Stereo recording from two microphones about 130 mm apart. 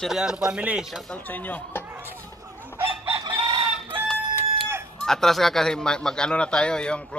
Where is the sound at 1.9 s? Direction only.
15° right (ahead or behind).